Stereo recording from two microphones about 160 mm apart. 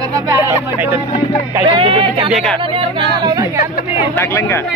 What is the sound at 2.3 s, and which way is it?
Speech, centre (ahead or behind).